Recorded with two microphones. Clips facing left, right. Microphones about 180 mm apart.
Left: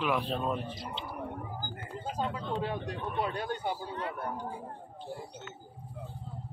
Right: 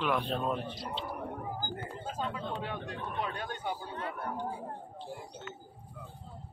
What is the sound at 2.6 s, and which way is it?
A man's voice, 35° left (ahead or behind).